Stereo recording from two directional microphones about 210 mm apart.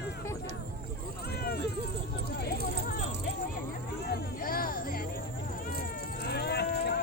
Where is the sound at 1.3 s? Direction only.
50° left (ahead or behind).